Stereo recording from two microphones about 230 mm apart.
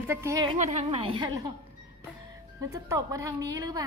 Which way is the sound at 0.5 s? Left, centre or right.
Right.